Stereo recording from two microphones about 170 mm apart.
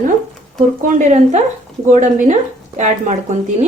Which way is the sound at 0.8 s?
50° right (ahead or behind).